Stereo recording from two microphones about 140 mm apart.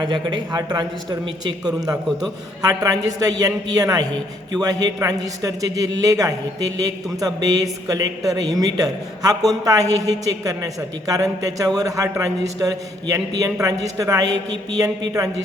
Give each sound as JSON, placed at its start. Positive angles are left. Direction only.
{"t": 0.0, "sound": "a woman's voice", "side_deg": -35}